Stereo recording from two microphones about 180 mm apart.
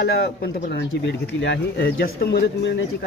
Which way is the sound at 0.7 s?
75° left (ahead or behind).